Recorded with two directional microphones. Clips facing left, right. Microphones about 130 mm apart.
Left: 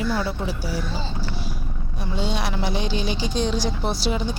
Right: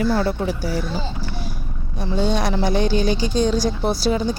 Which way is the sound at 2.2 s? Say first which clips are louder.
Right 6 dB; 45° right (ahead or behind).